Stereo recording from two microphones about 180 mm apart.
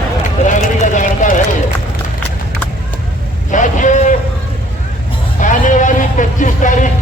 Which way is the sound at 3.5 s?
45° left (ahead or behind).